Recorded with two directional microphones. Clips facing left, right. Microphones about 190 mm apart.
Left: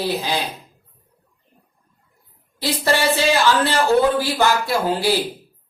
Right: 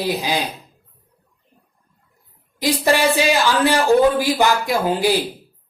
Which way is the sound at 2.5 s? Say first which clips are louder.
Right 3 dB; 15° right (ahead or behind).